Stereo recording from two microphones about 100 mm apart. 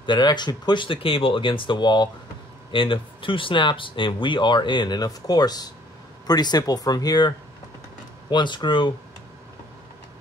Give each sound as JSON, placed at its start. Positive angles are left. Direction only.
{"t": 0.0, "sound": "speech", "side_deg": 50}
{"t": 0.8, "sound": "speech", "side_deg": 65}